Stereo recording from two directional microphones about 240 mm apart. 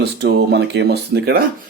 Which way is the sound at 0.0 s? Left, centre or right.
Right.